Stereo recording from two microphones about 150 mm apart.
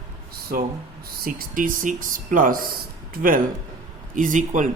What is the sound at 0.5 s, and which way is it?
Speech, 75° right (ahead or behind).